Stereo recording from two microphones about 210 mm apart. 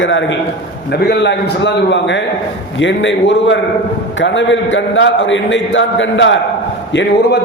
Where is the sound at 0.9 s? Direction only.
50° left (ahead or behind).